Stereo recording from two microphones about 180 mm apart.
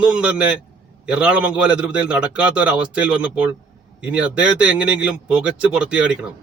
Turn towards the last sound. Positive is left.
turn(degrees=-5)  # may be behind; listen again after turning